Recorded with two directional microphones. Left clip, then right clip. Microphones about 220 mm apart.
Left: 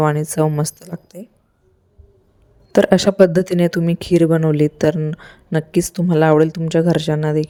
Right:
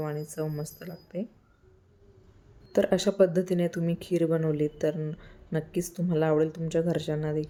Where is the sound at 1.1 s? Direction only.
Centre (ahead or behind).